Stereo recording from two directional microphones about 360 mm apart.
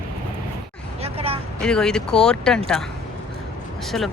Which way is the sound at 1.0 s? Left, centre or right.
Centre.